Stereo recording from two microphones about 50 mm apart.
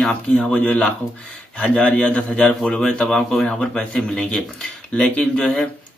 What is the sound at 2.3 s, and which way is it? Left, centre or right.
Speech, centre.